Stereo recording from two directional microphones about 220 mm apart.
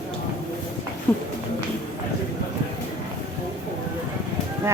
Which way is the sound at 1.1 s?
10° left (ahead or behind).